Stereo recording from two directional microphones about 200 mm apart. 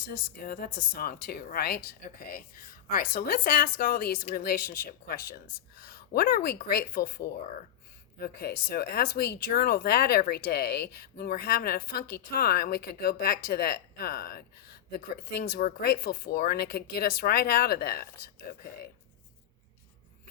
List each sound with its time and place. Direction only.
0.1 s speech: 50° left (ahead or behind)